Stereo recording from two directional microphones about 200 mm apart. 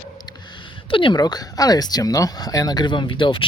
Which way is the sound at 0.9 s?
25° left (ahead or behind).